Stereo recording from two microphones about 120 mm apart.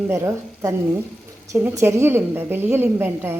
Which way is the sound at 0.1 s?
20° right (ahead or behind).